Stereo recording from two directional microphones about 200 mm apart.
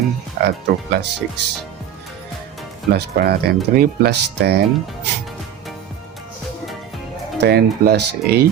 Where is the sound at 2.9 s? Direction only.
55° right (ahead or behind).